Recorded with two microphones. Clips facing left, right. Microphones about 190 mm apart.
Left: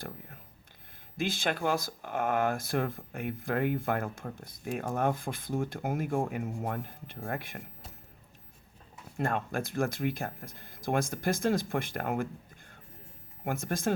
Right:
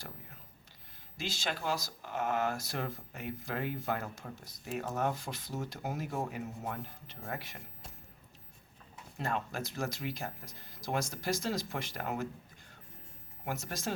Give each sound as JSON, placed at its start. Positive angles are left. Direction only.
{"t": 1.1, "sound": "speech", "side_deg": 55}
{"t": 9.1, "sound": "speech", "side_deg": 50}
{"t": 13.4, "sound": "speech", "side_deg": 50}